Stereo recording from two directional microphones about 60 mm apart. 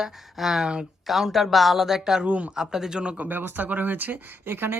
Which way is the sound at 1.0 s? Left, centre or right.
Centre.